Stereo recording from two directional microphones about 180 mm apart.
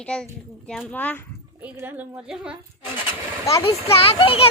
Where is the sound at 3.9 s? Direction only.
30° left (ahead or behind).